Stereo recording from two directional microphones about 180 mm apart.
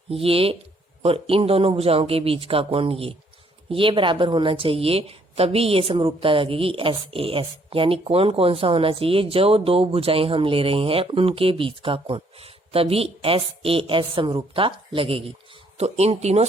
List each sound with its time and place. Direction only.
0.1 s speech: 30° right (ahead or behind)